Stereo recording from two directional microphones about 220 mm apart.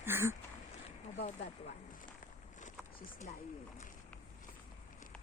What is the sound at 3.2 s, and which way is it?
Speech, 35° left (ahead or behind).